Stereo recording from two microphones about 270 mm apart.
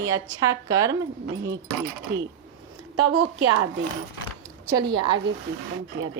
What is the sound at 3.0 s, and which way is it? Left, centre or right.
Speech, right.